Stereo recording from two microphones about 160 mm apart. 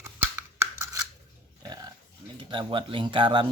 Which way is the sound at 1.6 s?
25° right (ahead or behind).